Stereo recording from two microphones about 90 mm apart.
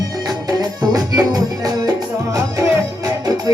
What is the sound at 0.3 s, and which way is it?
Music, 45° right (ahead or behind).